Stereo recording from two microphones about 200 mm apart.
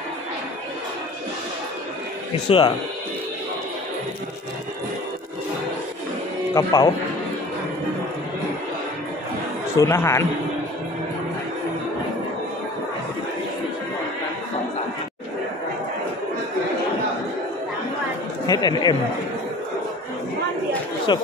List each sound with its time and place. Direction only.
2.3 s speech: 25° left (ahead or behind)
6.5 s speech: 15° left (ahead or behind)
9.8 s speech: 15° left (ahead or behind)
18.5 s speech: 20° left (ahead or behind)
21.1 s speech: 25° left (ahead or behind)